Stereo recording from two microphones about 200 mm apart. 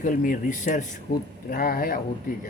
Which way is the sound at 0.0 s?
40° left (ahead or behind).